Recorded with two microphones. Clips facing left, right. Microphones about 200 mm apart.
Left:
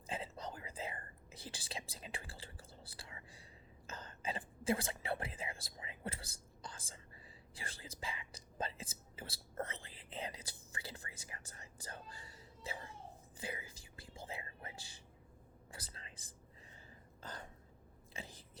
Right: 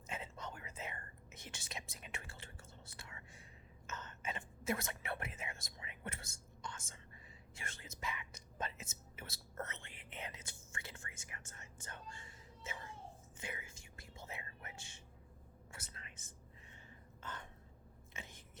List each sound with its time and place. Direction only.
0.1 s whispering: 30° left (ahead or behind)
17.2 s a sound: 35° left (ahead or behind)
18.1 s whispering: 35° left (ahead or behind)